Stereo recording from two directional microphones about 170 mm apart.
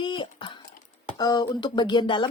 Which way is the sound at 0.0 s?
30° left (ahead or behind).